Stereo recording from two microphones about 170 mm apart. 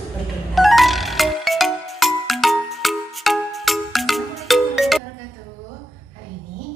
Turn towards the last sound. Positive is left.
turn(degrees=0)  # may be behind; listen again after turning